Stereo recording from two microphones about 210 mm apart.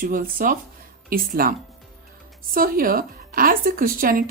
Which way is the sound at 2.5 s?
45° right (ahead or behind).